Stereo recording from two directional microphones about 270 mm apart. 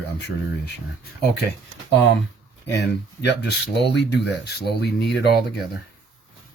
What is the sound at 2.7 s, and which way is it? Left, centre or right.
Speech, left.